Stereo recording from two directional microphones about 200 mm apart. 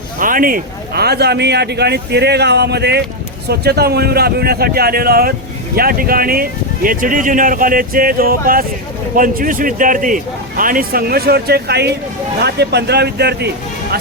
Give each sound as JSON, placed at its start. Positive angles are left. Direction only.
{"t": 0.2, "sound": "a man's voice", "side_deg": -45}